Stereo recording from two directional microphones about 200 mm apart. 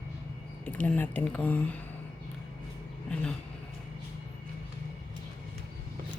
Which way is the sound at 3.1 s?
5° left (ahead or behind).